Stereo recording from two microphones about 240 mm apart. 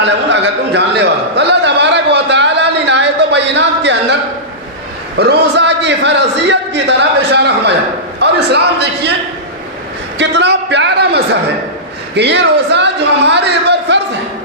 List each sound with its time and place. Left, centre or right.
0.0 s a sound: right
5.1 s a man's voice: right
10.2 s a man's voice: right